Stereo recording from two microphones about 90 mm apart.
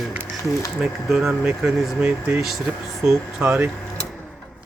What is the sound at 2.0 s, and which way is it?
Speech, 20° right (ahead or behind).